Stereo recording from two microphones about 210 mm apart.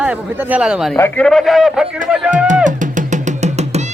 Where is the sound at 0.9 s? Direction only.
10° left (ahead or behind).